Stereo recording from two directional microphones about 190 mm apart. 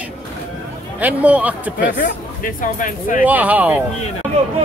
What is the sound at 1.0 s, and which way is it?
Speech, 10° right (ahead or behind).